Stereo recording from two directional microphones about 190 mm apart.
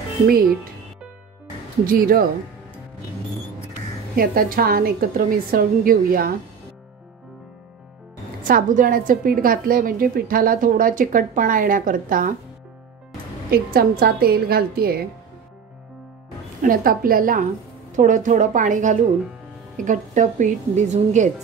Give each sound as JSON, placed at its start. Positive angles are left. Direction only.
{"t": 1.9, "sound": "a woman's voice", "side_deg": -50}
{"t": 4.2, "sound": "a woman's voice", "side_deg": -50}
{"t": 8.4, "sound": "a woman's voice", "side_deg": -45}
{"t": 13.5, "sound": "a woman's voice", "side_deg": -55}
{"t": 16.6, "sound": "a woman's voice", "side_deg": -45}